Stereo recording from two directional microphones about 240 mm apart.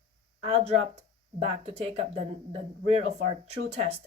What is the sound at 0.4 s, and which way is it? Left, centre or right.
Speech, right.